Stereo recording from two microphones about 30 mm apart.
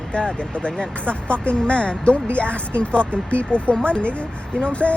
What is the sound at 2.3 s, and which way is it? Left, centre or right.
Speech, left.